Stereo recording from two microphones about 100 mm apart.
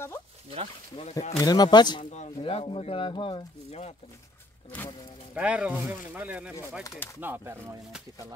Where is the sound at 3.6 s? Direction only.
90° left.